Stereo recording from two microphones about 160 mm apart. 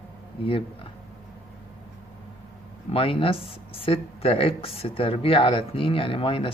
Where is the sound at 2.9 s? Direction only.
35° left (ahead or behind).